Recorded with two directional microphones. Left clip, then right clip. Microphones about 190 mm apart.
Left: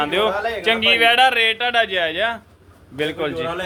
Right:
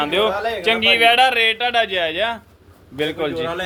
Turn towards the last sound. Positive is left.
turn(degrees=-10)  # may be behind; listen again after turning